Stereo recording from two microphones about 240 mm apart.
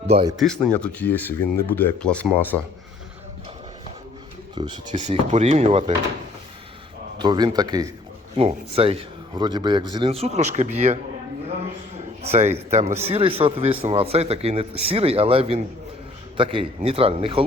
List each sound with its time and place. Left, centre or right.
0.1 s a man's voice: right
0.3 s speech: centre
4.5 s speech: centre
4.9 s a man's voice: right
7.2 s a man's voice: centre
12.2 s a man's voice: right